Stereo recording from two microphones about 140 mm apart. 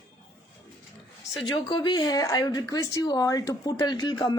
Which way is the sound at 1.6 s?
35° left (ahead or behind).